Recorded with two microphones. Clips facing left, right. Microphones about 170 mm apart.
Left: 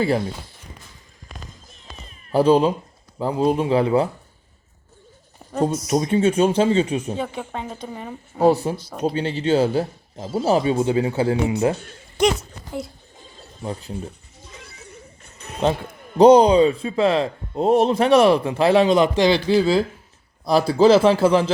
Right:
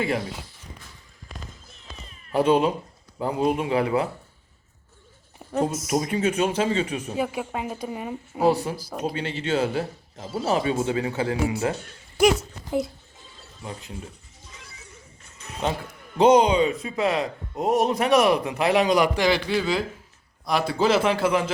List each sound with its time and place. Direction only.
0.2 s speech: 55° left (ahead or behind)
2.3 s speech: 30° left (ahead or behind)
5.4 s a sound: 10° right (ahead or behind)
5.9 s speech: 25° left (ahead or behind)
7.2 s a woman's voice: 10° right (ahead or behind)
8.6 s speech: 25° left (ahead or behind)
12.2 s speech: 5° right (ahead or behind)
13.1 s a sound: 50° left (ahead or behind)
13.7 s speech: 35° left (ahead or behind)
14.4 s music: 60° left (ahead or behind)
15.6 s speech: 30° left (ahead or behind)